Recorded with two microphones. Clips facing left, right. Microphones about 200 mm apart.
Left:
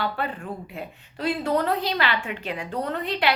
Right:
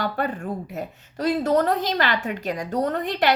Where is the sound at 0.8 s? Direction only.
40° right (ahead or behind).